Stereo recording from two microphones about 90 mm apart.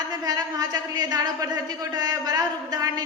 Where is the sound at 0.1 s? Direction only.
45° right (ahead or behind).